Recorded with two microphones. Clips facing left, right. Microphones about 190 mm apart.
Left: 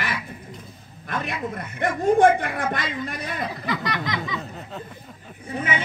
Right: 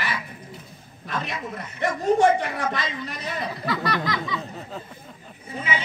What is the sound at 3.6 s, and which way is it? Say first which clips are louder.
Speech: right 5 dB; 20° left (ahead or behind).